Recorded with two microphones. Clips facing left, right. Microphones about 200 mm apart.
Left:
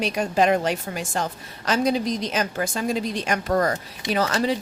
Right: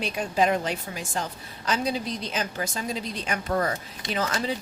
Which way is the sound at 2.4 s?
50° left (ahead or behind).